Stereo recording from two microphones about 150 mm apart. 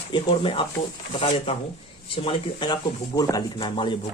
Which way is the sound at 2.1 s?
35° left (ahead or behind).